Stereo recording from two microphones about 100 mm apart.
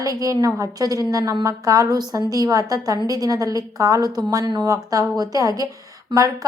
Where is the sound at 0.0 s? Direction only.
35° right (ahead or behind).